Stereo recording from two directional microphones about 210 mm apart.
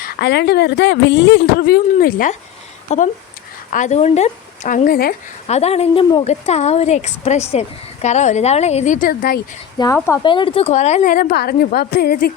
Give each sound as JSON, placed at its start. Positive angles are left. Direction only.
{"t": 0.0, "sound": "speech", "side_deg": 55}
{"t": 2.9, "sound": "a woman's voice", "side_deg": 35}
{"t": 5.5, "sound": "a woman's voice", "side_deg": 30}
{"t": 9.7, "sound": "speech", "side_deg": 15}
{"t": 10.2, "sound": "a woman's voice", "side_deg": 25}